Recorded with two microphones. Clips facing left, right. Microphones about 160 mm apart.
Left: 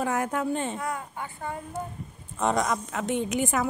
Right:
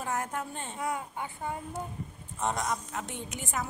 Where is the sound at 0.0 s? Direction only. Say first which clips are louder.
Left 7 dB; 90° left.